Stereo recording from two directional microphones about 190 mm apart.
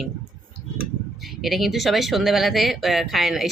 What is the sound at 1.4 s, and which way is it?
Speech, centre (ahead or behind).